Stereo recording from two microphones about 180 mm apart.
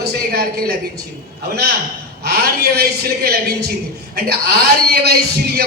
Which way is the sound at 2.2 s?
60° right (ahead or behind).